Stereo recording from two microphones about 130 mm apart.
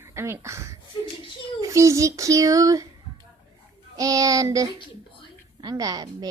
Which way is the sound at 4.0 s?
25° right (ahead or behind).